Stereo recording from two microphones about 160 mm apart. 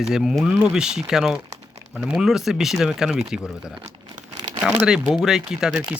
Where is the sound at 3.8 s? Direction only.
25° right (ahead or behind).